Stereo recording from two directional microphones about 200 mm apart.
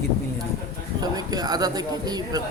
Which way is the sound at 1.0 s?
20° right (ahead or behind).